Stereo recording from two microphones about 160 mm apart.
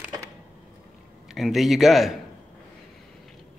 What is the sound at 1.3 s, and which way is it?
Speech, centre (ahead or behind).